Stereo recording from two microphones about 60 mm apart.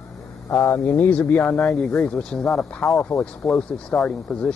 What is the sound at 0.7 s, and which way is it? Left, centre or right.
Speech, left.